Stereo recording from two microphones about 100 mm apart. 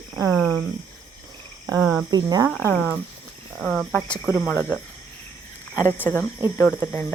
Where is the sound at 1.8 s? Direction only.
10° right (ahead or behind).